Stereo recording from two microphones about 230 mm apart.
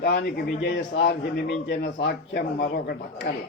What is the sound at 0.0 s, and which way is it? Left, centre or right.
A man's voice, left.